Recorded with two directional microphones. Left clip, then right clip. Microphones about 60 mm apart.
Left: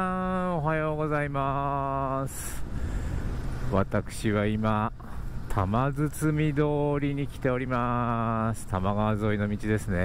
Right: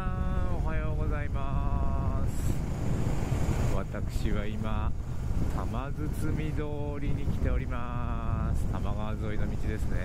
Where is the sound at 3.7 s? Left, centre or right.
Left.